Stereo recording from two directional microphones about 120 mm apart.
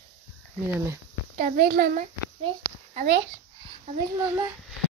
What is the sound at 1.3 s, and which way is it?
A child's voice, 85° right.